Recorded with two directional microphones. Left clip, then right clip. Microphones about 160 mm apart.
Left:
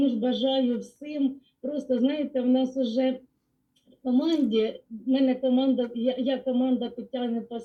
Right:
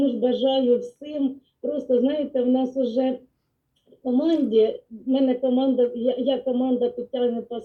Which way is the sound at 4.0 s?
30° left (ahead or behind).